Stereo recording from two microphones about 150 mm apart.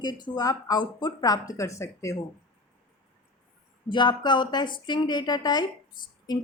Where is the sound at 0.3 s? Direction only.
25° left (ahead or behind).